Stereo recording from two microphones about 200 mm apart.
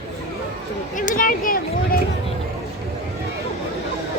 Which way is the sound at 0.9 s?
40° left (ahead or behind).